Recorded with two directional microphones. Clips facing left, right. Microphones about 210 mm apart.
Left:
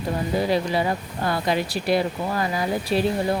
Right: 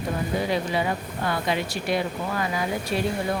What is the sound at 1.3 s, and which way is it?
Speech, 35° left (ahead or behind).